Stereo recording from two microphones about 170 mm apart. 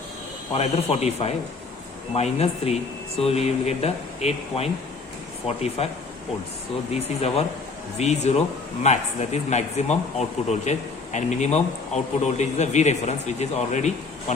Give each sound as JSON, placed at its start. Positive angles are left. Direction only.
{"t": 0.5, "sound": "speech", "side_deg": 35}
{"t": 6.9, "sound": "speech", "side_deg": 35}